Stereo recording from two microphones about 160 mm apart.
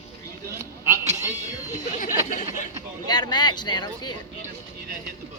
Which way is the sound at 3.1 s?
25° left (ahead or behind).